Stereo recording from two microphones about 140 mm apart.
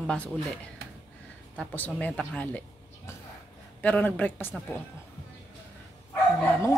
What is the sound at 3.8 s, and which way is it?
Speech, 10° left (ahead or behind).